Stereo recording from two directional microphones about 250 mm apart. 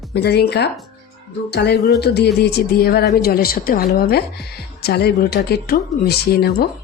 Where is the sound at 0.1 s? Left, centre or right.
Left.